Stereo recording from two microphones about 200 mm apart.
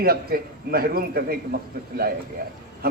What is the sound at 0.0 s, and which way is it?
A man's voice, 50° right (ahead or behind).